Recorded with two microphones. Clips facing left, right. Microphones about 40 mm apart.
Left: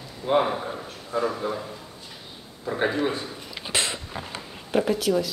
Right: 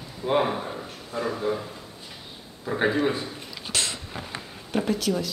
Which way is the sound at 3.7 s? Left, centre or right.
Left.